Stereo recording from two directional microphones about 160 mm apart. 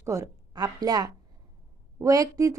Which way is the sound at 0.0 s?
20° right (ahead or behind).